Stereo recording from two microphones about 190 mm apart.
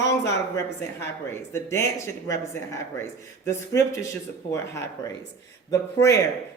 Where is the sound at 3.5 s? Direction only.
15° left (ahead or behind).